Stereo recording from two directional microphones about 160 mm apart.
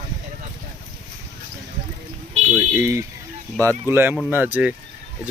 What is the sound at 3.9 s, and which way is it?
Speech, 15° right (ahead or behind).